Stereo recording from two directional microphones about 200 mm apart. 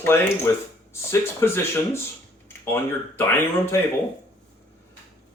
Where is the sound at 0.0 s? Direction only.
10° left (ahead or behind).